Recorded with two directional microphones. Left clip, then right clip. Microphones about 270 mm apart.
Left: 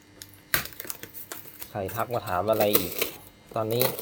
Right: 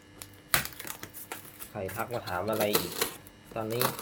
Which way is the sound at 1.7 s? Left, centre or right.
Left.